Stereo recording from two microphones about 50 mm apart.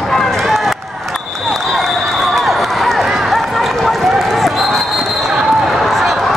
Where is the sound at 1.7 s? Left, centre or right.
Centre.